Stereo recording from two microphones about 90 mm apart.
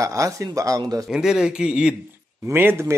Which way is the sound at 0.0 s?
40° right (ahead or behind).